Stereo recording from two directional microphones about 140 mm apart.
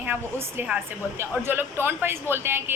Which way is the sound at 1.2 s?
15° right (ahead or behind).